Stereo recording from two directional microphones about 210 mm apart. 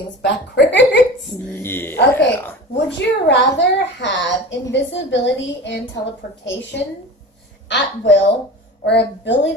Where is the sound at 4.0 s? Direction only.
55° left (ahead or behind).